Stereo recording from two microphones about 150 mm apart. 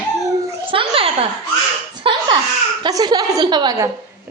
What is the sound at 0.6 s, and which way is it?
A child's voice, 35° right (ahead or behind).